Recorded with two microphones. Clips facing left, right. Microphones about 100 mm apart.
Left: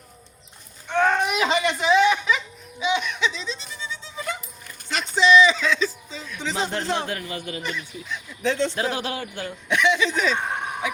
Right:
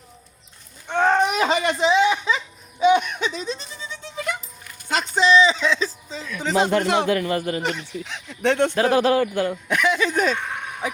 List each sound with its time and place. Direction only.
0.9 s a sound: 35° right (ahead or behind)
1.8 s a sound: 20° right (ahead or behind)
2.8 s speech: 50° right (ahead or behind)
5.3 s speech: 30° right (ahead or behind); by 6.8 s 45° right (ahead or behind)
6.8 s a man's voice: 75° right (ahead or behind)
7.3 s speech: 40° right (ahead or behind)
7.6 s speech: 70° right (ahead or behind); by 10.3 s 45° right (ahead or behind)
10.3 s a sound: 30° left (ahead or behind)
10.8 s speech: 40° right (ahead or behind)